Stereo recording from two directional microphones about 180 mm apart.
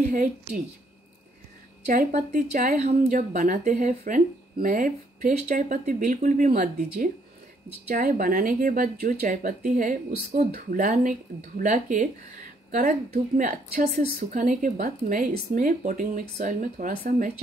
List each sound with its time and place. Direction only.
0.0 s speech: 45° right (ahead or behind)
1.9 s speech: 45° right (ahead or behind)